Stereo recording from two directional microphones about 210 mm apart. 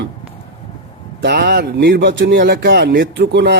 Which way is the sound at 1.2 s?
55° right (ahead or behind).